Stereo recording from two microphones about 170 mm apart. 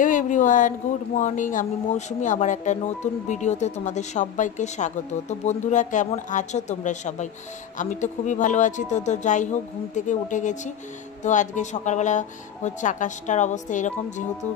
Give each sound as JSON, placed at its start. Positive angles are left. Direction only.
{"t": 0.0, "sound": "speech", "side_deg": 50}